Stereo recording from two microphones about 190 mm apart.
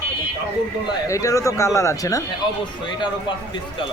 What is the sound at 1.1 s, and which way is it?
Speech, 15° left (ahead or behind).